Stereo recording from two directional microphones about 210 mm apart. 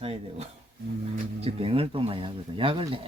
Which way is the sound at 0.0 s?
30° right (ahead or behind).